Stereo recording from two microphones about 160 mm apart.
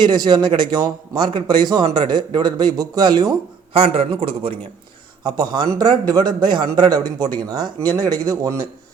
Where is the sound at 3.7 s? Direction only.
35° right (ahead or behind).